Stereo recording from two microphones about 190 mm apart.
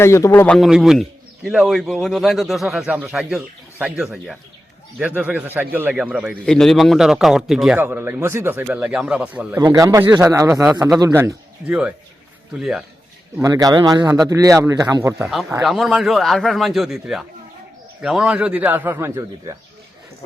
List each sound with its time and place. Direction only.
0.0 s a man's voice: 15° left (ahead or behind); by 9.6 s 5° right (ahead or behind)
9.6 s a man's voice: 20° right (ahead or behind); by 12.8 s centre (ahead or behind)
13.4 s a man's voice: 20° right (ahead or behind)
15.6 s a man's voice: centre (ahead or behind)